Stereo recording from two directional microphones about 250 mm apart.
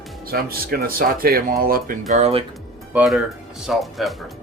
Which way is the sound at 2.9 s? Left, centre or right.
Centre.